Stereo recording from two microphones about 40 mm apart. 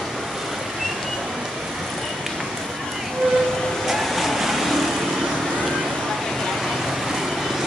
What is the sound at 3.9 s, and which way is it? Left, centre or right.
Vehicle, centre.